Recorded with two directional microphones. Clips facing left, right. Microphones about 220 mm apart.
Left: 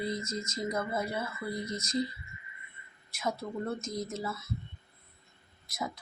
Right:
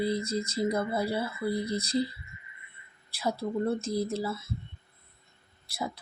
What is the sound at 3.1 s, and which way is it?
Speech, 35° right (ahead or behind).